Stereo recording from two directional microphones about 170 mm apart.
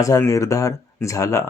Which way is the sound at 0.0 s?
20° left (ahead or behind).